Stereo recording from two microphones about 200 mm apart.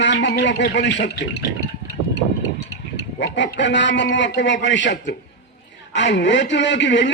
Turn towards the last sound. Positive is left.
turn(degrees=60)  # may be behind; listen again after turning